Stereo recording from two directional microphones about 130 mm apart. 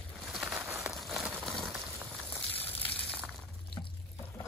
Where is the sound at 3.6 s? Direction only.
40° left (ahead or behind).